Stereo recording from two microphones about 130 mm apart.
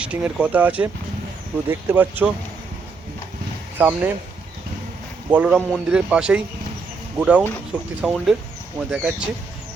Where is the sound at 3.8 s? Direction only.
15° right (ahead or behind).